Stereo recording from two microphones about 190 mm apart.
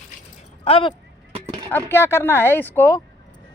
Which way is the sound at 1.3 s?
25° right (ahead or behind).